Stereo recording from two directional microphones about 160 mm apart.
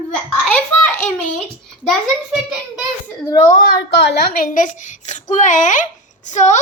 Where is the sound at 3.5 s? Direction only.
65° left (ahead or behind); by 5.2 s 50° left (ahead or behind).